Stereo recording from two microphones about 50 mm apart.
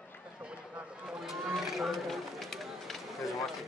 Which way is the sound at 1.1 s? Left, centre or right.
Centre.